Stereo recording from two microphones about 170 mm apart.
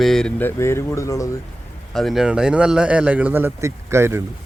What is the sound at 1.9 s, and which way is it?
A man's voice, centre (ahead or behind).